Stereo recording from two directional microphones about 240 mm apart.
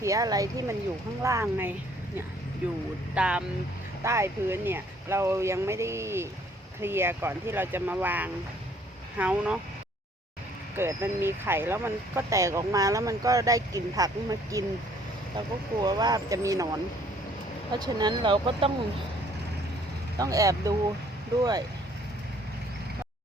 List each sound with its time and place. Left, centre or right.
0.0 s speech: centre
3.2 s speech: centre
10.8 s speech: centre
15.8 s speech: centre
17.7 s speech: centre
20.1 s speech: centre